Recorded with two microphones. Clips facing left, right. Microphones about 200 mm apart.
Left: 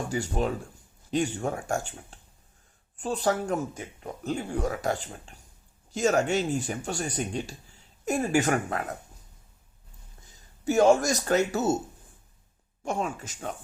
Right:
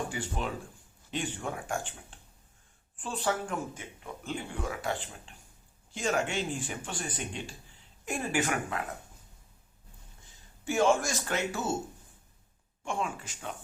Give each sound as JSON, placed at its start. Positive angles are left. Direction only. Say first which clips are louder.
{"t": 0.1, "sound": "speech", "louder": "left 7 dB", "side_deg": 40}
{"t": 10.7, "sound": "speech", "louder": "left 6 dB", "side_deg": 40}
{"t": 12.8, "sound": "speech", "louder": "left 4 dB", "side_deg": 40}